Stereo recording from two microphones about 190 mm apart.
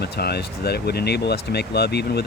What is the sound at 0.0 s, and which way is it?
Speech, 60° left (ahead or behind).